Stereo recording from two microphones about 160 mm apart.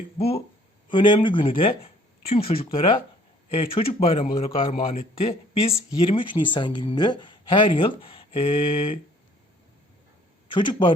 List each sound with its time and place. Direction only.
0.2 s speech: 40° left (ahead or behind)
10.5 s speech: 30° left (ahead or behind)